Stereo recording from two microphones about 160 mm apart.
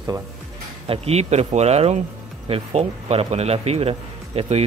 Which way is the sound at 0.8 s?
40° right (ahead or behind).